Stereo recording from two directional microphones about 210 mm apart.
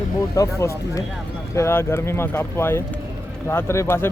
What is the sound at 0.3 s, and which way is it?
Speech, 15° left (ahead or behind).